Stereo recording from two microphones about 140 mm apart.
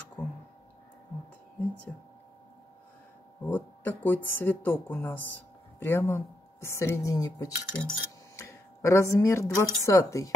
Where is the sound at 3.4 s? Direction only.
15° left (ahead or behind).